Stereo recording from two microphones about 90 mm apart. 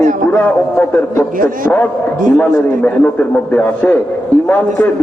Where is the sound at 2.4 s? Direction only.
20° left (ahead or behind).